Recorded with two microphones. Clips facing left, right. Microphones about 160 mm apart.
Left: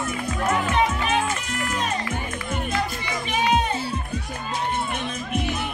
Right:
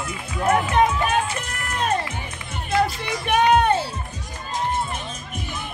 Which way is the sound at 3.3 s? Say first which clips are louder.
Right 6 dB; 60° right (ahead or behind).